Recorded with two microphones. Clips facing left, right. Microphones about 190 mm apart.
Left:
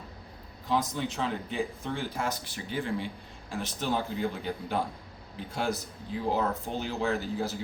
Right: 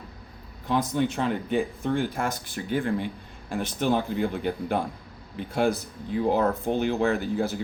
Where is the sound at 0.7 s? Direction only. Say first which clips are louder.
Right 5 dB; 55° right (ahead or behind).